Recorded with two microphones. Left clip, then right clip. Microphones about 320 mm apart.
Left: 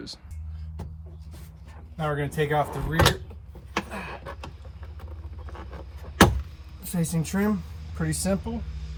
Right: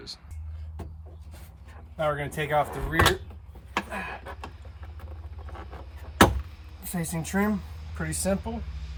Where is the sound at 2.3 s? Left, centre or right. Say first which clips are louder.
Left 1 dB; centre.